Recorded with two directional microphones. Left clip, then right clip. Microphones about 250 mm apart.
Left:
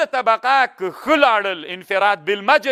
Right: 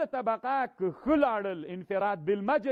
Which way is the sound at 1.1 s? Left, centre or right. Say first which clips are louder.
Left 13 dB; centre.